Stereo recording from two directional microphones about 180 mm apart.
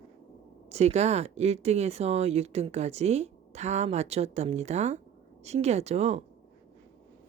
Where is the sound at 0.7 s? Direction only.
35° right (ahead or behind).